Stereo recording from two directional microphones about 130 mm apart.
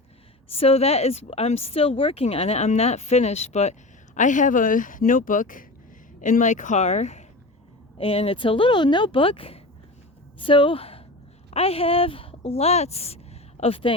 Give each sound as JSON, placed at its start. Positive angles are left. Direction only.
{"t": 0.5, "sound": "speech", "side_deg": 50}
{"t": 6.1, "sound": "speech", "side_deg": 75}
{"t": 7.9, "sound": "speech", "side_deg": 45}